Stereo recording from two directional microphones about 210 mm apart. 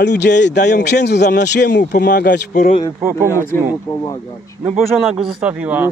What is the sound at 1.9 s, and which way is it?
Speech, 45° left (ahead or behind).